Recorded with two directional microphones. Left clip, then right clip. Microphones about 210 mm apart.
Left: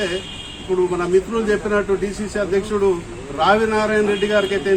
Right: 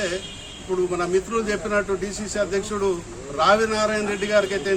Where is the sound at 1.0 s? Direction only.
20° right (ahead or behind).